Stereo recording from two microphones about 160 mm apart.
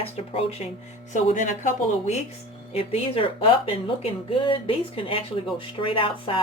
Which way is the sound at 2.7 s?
35° left (ahead or behind).